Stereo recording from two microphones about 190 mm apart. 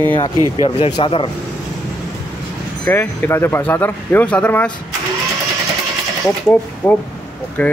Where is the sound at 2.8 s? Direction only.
10° left (ahead or behind).